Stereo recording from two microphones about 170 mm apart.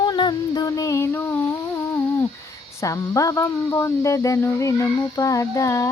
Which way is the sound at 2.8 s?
20° left (ahead or behind).